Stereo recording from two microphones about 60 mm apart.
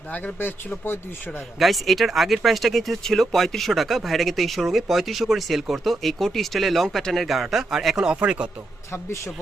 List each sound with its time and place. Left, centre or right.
0.1 s speech: left
1.5 s speech: centre
8.9 s a man's voice: left